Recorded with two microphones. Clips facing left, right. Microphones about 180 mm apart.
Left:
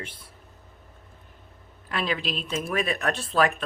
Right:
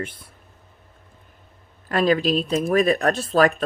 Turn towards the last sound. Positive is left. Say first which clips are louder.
# right 6 dB
turn(degrees=-40)  # may be behind; listen again after turning